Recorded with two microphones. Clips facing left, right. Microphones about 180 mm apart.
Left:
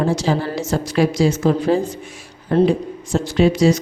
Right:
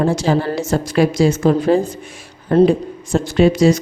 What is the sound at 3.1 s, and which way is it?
Speech, 50° right (ahead or behind).